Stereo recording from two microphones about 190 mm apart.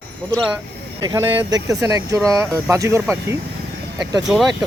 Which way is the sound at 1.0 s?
15° right (ahead or behind).